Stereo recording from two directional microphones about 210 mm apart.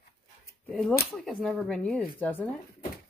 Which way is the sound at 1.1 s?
5° left (ahead or behind).